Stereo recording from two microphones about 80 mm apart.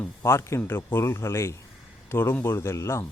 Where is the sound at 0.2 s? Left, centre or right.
Left.